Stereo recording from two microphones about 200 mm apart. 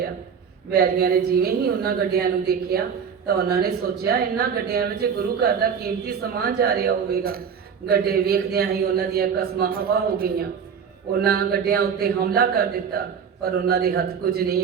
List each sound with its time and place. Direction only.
0.7 s a woman's voice: 50° right (ahead or behind)